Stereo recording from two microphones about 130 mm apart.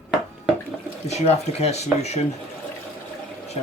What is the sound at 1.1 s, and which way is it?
Speech, 60° left (ahead or behind).